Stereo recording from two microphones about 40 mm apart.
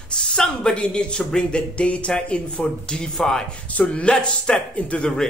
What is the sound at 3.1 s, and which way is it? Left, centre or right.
Speech, centre.